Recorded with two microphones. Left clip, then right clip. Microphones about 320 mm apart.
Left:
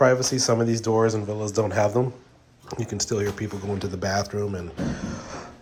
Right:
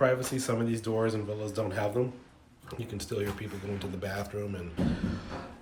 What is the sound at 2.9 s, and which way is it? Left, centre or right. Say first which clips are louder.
Speech: left 8 dB; centre.